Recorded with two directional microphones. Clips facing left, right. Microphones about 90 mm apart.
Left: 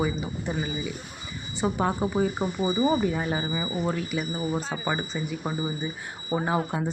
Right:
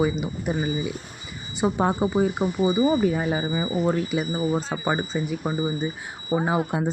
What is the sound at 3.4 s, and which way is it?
Speech, 30° right (ahead or behind).